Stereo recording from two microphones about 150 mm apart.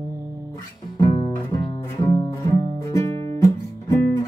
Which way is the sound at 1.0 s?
35° left (ahead or behind).